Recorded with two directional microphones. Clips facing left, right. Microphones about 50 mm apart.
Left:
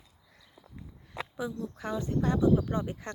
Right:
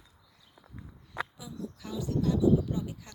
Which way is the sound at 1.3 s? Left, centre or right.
Left.